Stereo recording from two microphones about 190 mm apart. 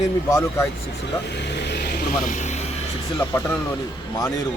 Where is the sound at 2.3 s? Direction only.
40° left (ahead or behind).